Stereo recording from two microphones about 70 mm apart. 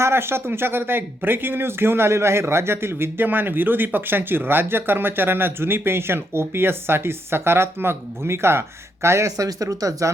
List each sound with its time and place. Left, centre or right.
0.0 s speech: right